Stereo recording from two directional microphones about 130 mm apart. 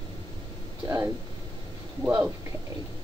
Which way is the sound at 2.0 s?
15° right (ahead or behind).